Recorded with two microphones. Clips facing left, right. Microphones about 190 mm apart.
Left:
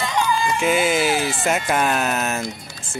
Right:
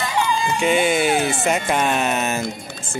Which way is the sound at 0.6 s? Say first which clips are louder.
Right 2 dB; 5° left (ahead or behind).